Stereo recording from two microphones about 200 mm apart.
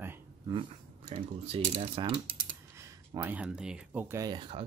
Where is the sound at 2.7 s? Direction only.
15° right (ahead or behind).